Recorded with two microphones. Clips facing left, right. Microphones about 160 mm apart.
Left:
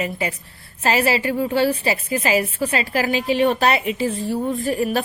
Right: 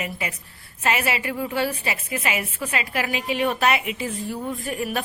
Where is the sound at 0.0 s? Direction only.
35° left (ahead or behind).